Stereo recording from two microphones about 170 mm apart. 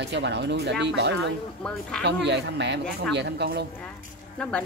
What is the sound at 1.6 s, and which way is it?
Speech, 5° left (ahead or behind).